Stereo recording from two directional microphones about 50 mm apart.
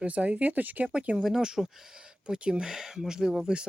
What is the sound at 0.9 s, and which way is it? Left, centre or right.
Speech, right.